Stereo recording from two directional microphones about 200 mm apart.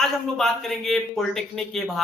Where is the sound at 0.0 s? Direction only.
Centre (ahead or behind).